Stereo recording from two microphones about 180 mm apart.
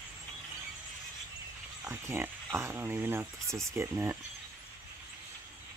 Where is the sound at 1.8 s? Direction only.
15° right (ahead or behind).